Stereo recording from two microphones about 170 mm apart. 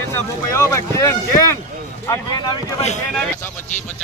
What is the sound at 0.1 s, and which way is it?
Speech, 15° left (ahead or behind).